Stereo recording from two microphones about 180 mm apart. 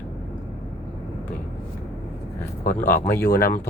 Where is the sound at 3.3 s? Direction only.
60° left (ahead or behind).